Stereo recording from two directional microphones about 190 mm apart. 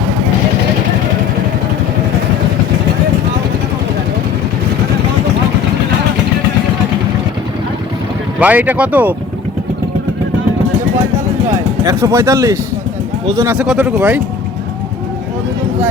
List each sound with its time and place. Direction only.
8.4 s speech: 10° right (ahead or behind)
11.4 s speech: 15° right (ahead or behind)